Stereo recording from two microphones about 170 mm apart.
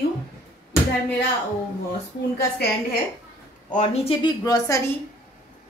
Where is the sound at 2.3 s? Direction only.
70° left (ahead or behind).